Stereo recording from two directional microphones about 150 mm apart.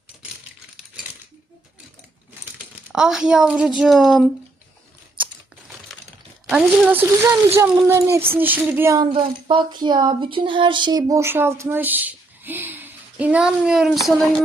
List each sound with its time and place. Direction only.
2.9 s a woman's voice: 5° right (ahead or behind)
6.5 s speech: 10° right (ahead or behind)
9.0 s speech: 35° right (ahead or behind); by 14.4 s centre (ahead or behind)